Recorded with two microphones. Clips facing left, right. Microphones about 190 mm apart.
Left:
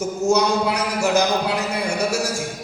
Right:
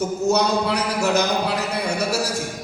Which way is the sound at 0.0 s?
65° right (ahead or behind).